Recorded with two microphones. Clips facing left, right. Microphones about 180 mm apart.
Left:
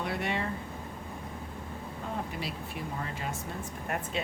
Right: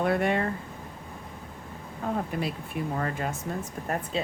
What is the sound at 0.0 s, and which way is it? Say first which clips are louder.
Speech: right 8 dB; 50° right (ahead or behind).